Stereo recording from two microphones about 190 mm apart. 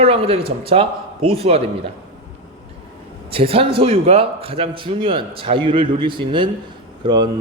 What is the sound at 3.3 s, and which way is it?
A man's voice, 30° right (ahead or behind).